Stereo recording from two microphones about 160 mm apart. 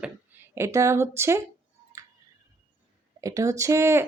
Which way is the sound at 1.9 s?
20° right (ahead or behind).